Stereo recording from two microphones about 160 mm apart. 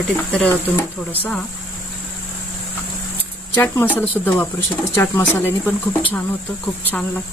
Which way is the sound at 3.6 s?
10° left (ahead or behind).